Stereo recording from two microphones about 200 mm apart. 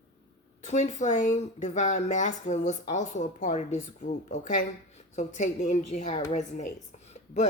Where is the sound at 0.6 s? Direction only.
35° left (ahead or behind).